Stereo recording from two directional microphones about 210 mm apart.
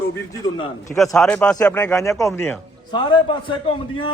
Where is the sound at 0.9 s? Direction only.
Centre (ahead or behind).